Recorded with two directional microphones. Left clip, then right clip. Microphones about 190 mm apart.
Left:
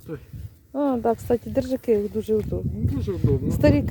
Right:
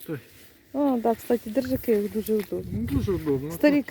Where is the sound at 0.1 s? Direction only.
10° right (ahead or behind).